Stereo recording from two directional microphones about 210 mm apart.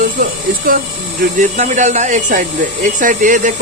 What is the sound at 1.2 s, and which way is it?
Speech, 35° right (ahead or behind).